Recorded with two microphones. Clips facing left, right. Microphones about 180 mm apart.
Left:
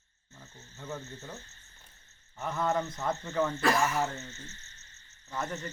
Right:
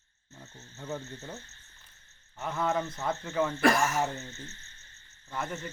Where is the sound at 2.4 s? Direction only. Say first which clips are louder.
Even; 5° right (ahead or behind).